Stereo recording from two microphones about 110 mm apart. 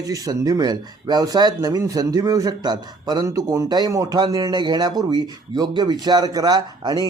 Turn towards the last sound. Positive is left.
turn(degrees=-35)  # may be behind; listen again after turning